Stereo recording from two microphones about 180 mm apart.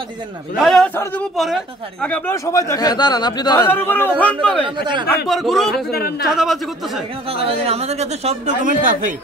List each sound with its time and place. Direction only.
0.6 s a man's voice: centre (ahead or behind); by 3.6 s 25° left (ahead or behind)
3.6 s a man's voice: 10° left (ahead or behind)
5.9 s speech: 60° left (ahead or behind)
6.2 s a man's voice: centre (ahead or behind)
7.2 s a man's voice: 30° right (ahead or behind); by 9.1 s 45° right (ahead or behind)